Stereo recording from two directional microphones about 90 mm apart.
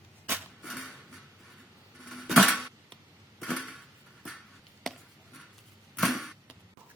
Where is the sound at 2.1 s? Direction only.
Centre (ahead or behind).